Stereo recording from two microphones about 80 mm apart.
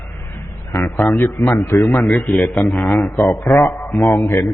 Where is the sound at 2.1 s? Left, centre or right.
Centre.